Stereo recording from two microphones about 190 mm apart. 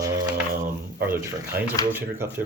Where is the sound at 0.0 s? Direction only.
20° right (ahead or behind).